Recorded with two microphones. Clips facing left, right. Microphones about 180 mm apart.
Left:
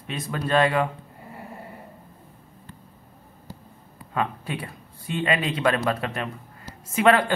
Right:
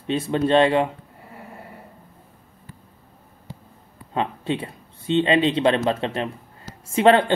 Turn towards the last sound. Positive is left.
turn(degrees=-25)  # may be behind; listen again after turning